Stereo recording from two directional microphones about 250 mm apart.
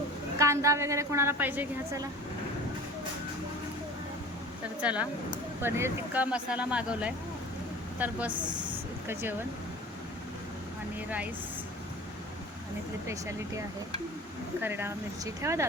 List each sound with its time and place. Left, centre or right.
0.3 s a woman's voice: centre
4.8 s a woman's voice: centre
8.3 s a woman's voice: centre
14.6 s a woman's voice: centre